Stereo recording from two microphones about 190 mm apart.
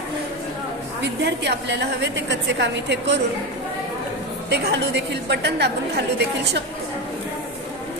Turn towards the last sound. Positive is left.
turn(degrees=-60)  # may be behind; listen again after turning